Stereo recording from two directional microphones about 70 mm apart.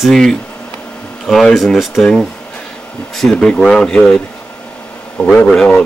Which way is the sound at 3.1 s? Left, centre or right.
Centre.